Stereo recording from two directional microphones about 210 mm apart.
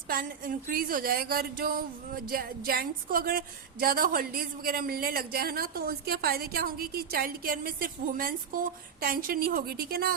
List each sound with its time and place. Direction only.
0.1 s a woman's voice: 45° right (ahead or behind)